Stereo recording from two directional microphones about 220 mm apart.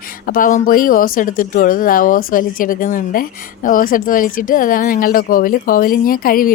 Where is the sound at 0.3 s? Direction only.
40° left (ahead or behind).